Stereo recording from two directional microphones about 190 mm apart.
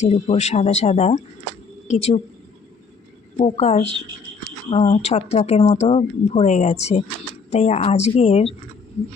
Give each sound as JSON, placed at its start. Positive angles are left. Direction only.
{"t": 0.0, "sound": "speech", "side_deg": 35}
{"t": 3.3, "sound": "speech", "side_deg": 35}